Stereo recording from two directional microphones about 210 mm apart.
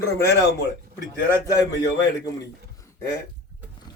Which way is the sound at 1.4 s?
15° left (ahead or behind).